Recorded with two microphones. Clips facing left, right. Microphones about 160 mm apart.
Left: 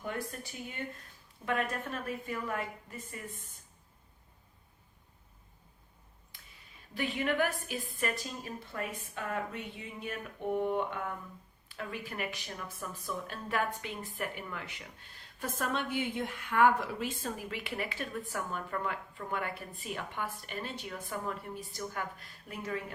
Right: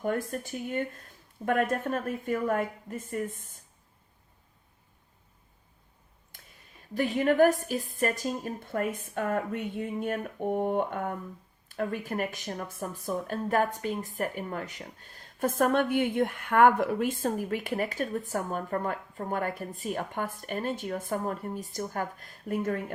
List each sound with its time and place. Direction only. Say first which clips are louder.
0.3 s a woman's voice: right 9 dB; 50° right (ahead or behind)
6.9 s a woman's voice: right 7 dB; 45° right (ahead or behind)